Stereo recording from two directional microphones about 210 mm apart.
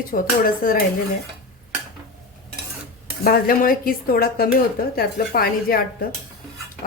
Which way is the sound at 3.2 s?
45° left (ahead or behind).